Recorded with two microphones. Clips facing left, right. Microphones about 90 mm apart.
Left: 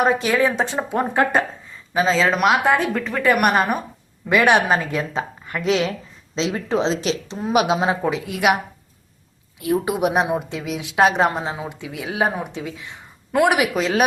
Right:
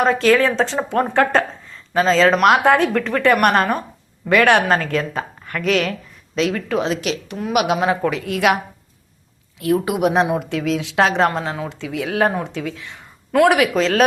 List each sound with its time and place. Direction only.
0.0 s a woman's voice: 15° left (ahead or behind)